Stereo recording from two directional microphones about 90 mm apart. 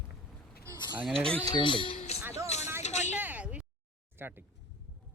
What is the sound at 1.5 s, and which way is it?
Speech, 60° left (ahead or behind).